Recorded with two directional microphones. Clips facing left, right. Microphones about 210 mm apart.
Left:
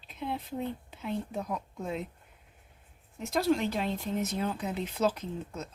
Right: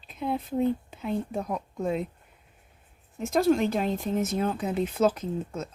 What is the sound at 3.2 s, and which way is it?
Speech, 50° right (ahead or behind).